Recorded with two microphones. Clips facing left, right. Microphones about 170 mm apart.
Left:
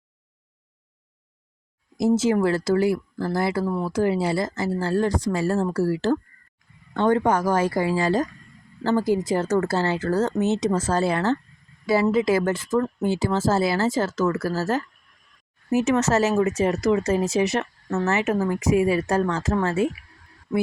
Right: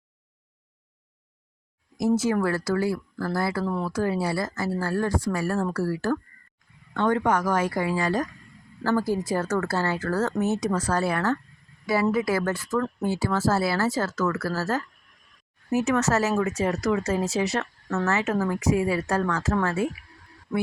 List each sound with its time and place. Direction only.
2.0 s speech: 25° left (ahead or behind)